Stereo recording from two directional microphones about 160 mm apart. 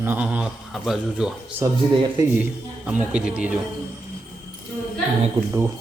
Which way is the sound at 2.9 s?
5° right (ahead or behind).